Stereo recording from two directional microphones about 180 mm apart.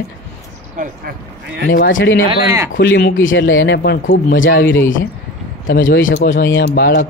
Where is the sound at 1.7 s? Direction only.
85° left.